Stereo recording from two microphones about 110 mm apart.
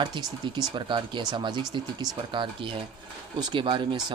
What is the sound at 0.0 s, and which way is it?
Speech, 40° right (ahead or behind).